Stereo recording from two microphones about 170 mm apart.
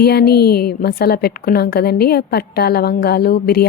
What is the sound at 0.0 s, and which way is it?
A woman's voice, 65° left (ahead or behind).